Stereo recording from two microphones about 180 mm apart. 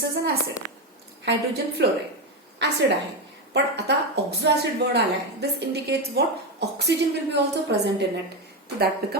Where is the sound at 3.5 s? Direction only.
65° right (ahead or behind).